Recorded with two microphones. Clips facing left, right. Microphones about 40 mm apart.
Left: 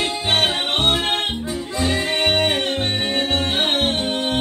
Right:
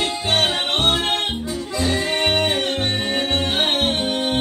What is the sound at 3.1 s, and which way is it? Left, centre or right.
Music, right.